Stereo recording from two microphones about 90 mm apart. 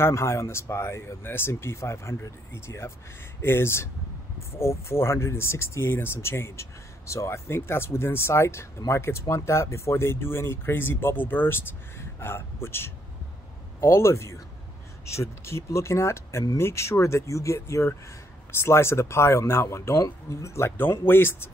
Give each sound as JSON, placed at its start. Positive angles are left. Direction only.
{"t": 0.0, "sound": "speech", "side_deg": 30}